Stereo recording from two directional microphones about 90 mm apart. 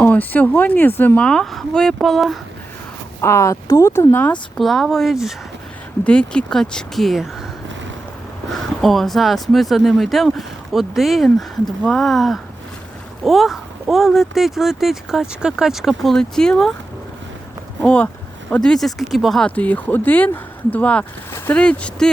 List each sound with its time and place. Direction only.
0.0 s speech: 20° left (ahead or behind)
1.2 s speech: 5° left (ahead or behind)
3.2 s speech: 30° left (ahead or behind)
4.1 s speech: 20° left (ahead or behind)
4.5 s speech: centre (ahead or behind)
6.1 s speech: 10° left (ahead or behind)
8.4 s speech: centre (ahead or behind)
17.8 s speech: 15° left (ahead or behind)
18.5 s speech: 5° left (ahead or behind)
19.5 s speech: 15° left (ahead or behind)